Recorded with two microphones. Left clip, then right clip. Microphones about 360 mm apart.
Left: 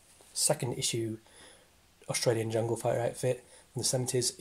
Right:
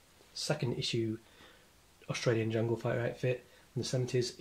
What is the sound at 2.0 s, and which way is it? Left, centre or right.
Speech, centre.